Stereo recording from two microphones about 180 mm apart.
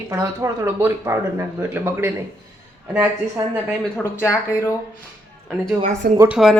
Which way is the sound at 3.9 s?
15° left (ahead or behind).